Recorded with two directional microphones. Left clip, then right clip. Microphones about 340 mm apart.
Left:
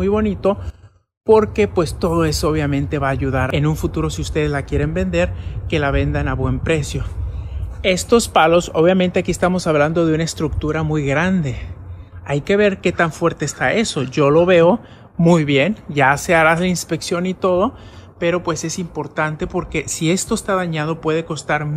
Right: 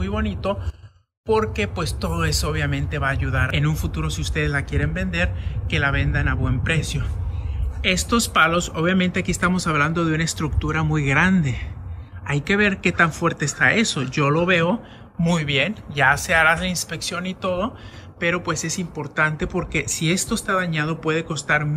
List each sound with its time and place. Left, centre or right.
0.0 s a man's voice: centre